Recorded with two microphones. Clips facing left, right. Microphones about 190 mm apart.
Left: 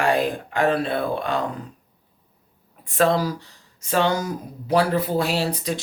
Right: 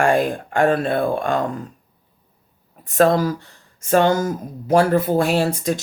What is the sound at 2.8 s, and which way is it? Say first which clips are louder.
Speech: right 4 dB; 45° right (ahead or behind).